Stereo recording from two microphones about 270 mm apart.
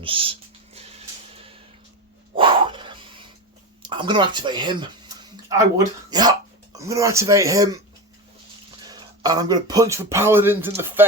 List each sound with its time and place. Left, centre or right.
0.0 s a sound: centre
2.3 s dog: centre
3.8 s speech: centre
8.8 s speech: centre